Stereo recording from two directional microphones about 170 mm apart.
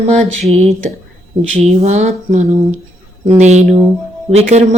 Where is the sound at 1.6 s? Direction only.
40° right (ahead or behind).